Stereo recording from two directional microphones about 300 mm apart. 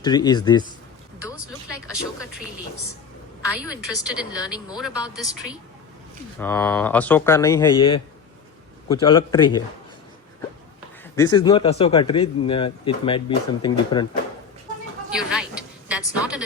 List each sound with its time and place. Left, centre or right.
0.0 s a man's voice: centre
3.6 s speech: centre
6.4 s a man's voice: centre
11.1 s a man's voice: centre
15.1 s a sound: centre